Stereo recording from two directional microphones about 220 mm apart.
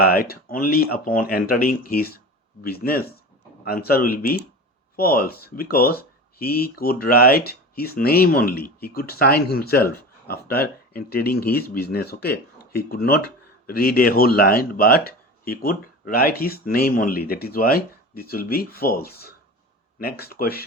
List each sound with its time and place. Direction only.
0.0 s speech: 40° left (ahead or behind)